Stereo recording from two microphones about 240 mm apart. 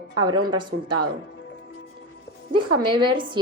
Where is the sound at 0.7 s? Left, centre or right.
Right.